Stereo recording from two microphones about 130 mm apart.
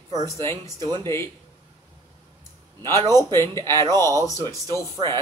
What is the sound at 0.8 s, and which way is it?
Speech, 35° right (ahead or behind).